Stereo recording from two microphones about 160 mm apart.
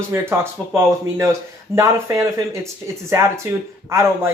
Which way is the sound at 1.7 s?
20° right (ahead or behind).